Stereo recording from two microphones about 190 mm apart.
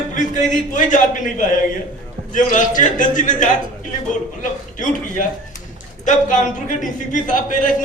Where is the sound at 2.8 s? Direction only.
40° left (ahead or behind).